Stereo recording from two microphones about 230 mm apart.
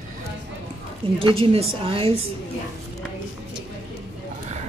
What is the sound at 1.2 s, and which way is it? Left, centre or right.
Speech, right.